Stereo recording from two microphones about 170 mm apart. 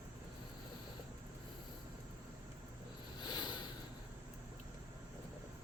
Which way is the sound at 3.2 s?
25° left (ahead or behind).